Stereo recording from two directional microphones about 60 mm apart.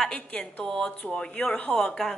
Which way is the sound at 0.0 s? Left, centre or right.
Centre.